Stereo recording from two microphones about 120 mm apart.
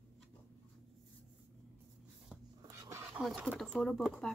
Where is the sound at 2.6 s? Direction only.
25° right (ahead or behind).